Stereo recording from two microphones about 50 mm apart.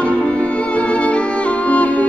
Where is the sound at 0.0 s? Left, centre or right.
Centre.